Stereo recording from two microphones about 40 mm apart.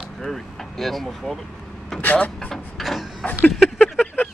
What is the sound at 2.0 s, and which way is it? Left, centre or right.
Speech, left.